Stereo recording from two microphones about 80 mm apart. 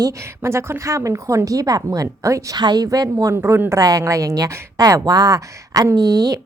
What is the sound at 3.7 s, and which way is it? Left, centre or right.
A woman's voice, right.